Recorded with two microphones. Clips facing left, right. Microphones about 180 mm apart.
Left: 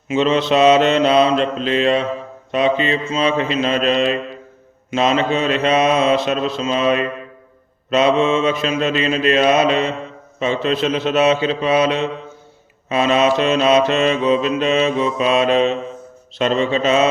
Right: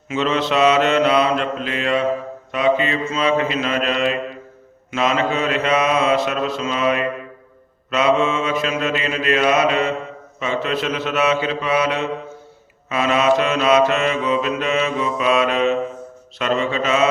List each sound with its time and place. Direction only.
0.1 s mantra: 20° left (ahead or behind)